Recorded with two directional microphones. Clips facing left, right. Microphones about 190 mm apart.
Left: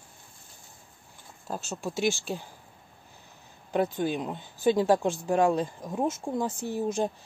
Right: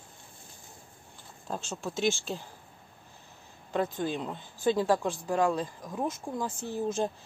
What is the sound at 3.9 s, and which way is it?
Speech, 15° left (ahead or behind).